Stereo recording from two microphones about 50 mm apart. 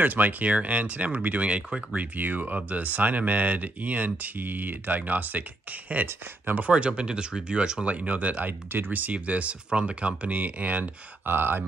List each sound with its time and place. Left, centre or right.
0.0 s speech: right
2.1 s speech: right
6.7 s speech: right
7.9 s speech: right
8.5 s speech: right
11.2 s speech: right